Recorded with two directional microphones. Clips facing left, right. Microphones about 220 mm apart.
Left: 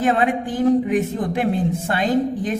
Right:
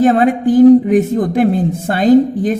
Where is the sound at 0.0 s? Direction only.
40° right (ahead or behind).